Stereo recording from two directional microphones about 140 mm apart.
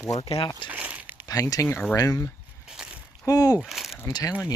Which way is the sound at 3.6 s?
Centre (ahead or behind).